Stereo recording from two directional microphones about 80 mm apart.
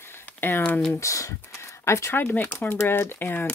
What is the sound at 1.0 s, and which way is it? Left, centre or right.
Speech, left.